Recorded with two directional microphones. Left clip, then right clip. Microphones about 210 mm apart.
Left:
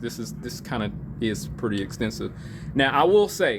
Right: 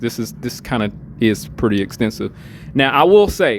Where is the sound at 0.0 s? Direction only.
40° right (ahead or behind).